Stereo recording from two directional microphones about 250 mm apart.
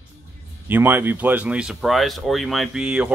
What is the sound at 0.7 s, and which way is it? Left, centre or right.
Speech, centre.